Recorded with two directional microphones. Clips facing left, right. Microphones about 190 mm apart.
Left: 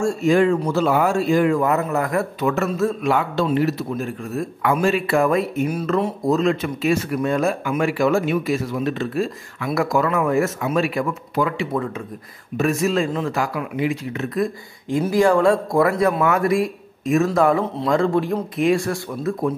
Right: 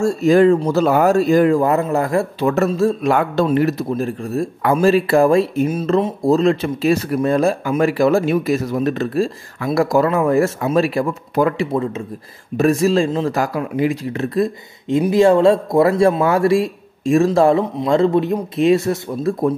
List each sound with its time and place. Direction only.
0.0 s speech: 35° right (ahead or behind)
3.2 s speech: 50° right (ahead or behind)
3.9 s speech: 35° right (ahead or behind)
11.7 s speech: 25° right (ahead or behind)
12.5 s speech: 35° right (ahead or behind)